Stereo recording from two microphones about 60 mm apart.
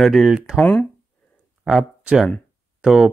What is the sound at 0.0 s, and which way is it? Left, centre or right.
Speech, centre.